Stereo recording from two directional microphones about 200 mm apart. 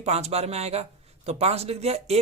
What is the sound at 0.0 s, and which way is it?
Speech, 30° right (ahead or behind).